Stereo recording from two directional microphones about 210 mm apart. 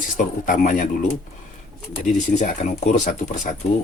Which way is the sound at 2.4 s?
35° left (ahead or behind).